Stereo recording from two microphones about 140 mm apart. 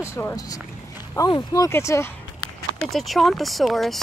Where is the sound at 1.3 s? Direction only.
25° left (ahead or behind).